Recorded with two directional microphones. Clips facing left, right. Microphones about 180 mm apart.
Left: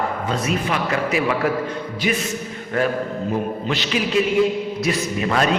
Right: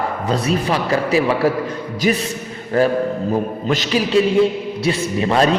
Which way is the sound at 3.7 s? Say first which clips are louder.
Right 5 dB; 40° right (ahead or behind).